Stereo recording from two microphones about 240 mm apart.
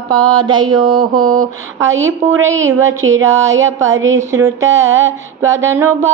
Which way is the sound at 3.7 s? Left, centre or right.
Right.